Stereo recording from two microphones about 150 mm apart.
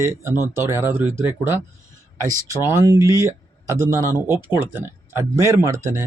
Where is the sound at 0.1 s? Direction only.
15° right (ahead or behind).